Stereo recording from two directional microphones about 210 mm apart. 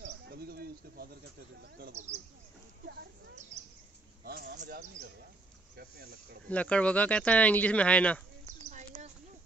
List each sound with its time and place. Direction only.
0.0 s bird: 50° right (ahead or behind)
1.6 s speech: 50° right (ahead or behind)
4.2 s a sound: 45° right (ahead or behind)
6.5 s speech: 5° left (ahead or behind)